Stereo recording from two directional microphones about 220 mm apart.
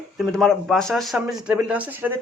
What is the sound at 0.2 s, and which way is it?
Speech, centre (ahead or behind).